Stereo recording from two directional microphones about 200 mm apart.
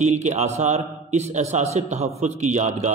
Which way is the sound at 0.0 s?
35° right (ahead or behind).